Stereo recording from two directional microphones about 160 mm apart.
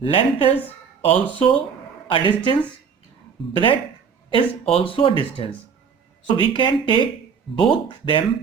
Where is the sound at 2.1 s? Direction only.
35° left (ahead or behind).